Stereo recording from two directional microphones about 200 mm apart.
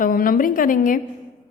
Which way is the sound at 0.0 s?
45° left (ahead or behind).